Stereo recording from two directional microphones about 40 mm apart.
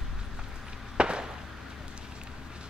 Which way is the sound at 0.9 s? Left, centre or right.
Right.